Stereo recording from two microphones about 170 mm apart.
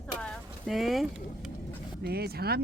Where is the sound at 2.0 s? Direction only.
70° right (ahead or behind).